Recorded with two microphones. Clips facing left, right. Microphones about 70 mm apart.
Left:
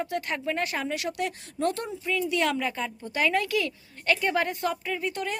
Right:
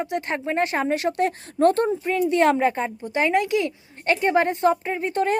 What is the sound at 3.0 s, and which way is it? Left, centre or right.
A woman's voice, right.